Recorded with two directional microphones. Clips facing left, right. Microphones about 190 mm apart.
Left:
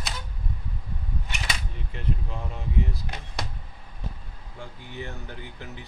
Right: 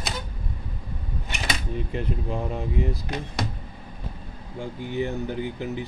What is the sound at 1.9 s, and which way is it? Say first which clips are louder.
Speech: right 3 dB; 15° right (ahead or behind).